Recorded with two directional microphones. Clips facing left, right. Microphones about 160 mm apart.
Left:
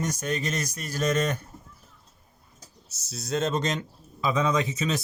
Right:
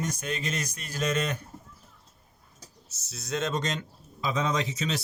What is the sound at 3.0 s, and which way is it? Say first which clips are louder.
Speech: left 3 dB; 35° left (ahead or behind).